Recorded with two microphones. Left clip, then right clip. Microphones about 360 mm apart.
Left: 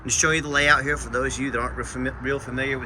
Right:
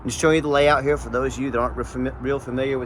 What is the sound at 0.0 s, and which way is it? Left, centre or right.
Speech, centre.